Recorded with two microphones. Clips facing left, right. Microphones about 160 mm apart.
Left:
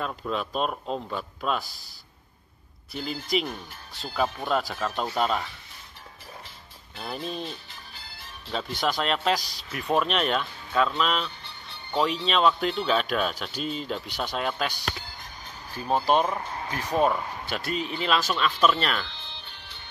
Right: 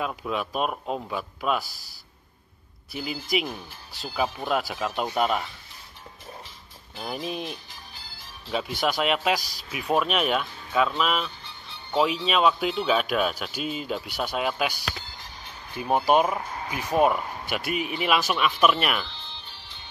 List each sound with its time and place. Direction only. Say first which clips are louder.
0.0 s speech: right 1 dB; 5° right (ahead or behind)
2.9 s speech: even; 10° right (ahead or behind)
7.0 s speech: right 1 dB; 10° right (ahead or behind)
7.7 s music: even; 60° left (ahead or behind)
8.5 s speech: right 2 dB; 10° right (ahead or behind)
11.4 s music: even; 65° left (ahead or behind)
11.9 s speech: right 2 dB; 5° right (ahead or behind)
15.8 s speech: right 2 dB; 10° right (ahead or behind)